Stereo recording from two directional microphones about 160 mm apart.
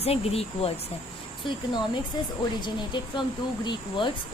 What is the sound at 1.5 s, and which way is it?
A woman's voice, 30° left (ahead or behind).